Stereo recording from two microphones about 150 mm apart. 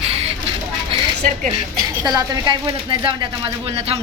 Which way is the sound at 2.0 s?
30° right (ahead or behind).